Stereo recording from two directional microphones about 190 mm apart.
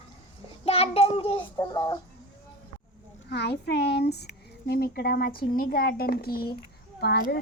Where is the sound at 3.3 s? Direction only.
60° left (ahead or behind).